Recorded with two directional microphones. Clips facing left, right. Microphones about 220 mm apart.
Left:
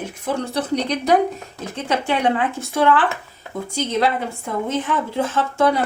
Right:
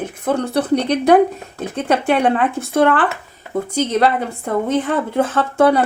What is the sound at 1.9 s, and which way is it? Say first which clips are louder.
Speech: right 4 dB; 60° right (ahead or behind).